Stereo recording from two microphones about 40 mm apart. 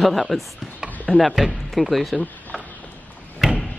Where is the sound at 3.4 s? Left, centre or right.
Centre.